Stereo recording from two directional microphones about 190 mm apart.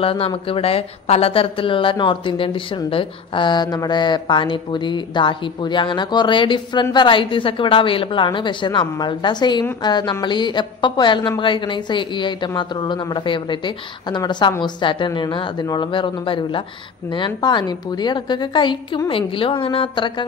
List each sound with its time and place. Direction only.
0.0 s a woman's voice: 30° left (ahead or behind)